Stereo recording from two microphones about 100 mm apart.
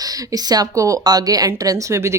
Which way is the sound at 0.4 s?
40° right (ahead or behind).